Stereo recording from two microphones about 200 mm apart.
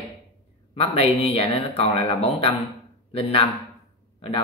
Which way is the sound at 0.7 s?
30° left (ahead or behind).